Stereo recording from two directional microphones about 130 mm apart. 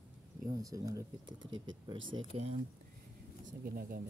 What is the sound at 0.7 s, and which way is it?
Speech, 25° right (ahead or behind).